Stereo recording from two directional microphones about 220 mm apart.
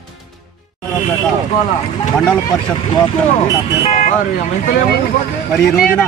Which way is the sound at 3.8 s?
35° left (ahead or behind).